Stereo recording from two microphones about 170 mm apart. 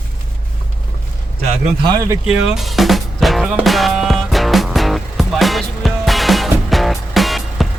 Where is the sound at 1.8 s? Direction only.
20° right (ahead or behind).